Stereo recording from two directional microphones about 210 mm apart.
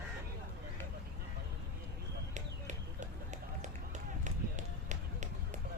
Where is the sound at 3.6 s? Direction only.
35° right (ahead or behind).